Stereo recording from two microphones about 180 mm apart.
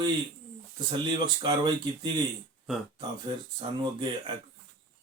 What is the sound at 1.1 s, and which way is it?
Speech, 25° right (ahead or behind).